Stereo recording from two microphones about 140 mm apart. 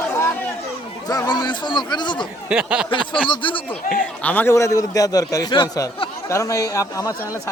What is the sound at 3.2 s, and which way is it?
Speech, 35° left (ahead or behind).